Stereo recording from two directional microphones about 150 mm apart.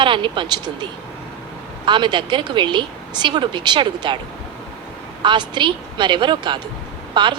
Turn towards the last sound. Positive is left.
turn(degrees=-30)  # may be behind; listen again after turning